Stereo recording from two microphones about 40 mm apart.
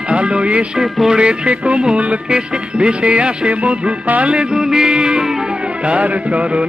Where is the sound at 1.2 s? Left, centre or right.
Right.